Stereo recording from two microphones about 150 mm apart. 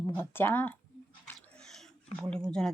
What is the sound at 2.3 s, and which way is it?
Speech, 5° left (ahead or behind).